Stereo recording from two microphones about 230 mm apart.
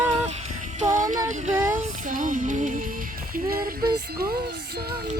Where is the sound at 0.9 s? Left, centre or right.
Right.